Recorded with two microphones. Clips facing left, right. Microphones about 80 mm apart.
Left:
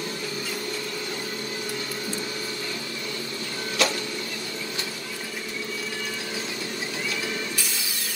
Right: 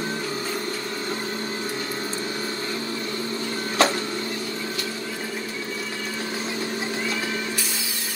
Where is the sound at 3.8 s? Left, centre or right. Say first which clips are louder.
Right 5 dB; right.